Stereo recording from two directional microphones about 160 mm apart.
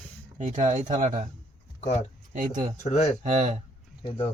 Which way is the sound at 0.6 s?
50° right (ahead or behind).